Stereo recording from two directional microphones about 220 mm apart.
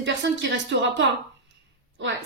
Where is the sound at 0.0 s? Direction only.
55° right (ahead or behind).